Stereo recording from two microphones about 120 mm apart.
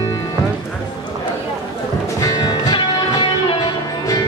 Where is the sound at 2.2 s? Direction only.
35° left (ahead or behind).